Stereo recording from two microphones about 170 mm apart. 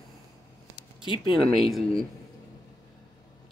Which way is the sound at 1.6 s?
Centre (ahead or behind).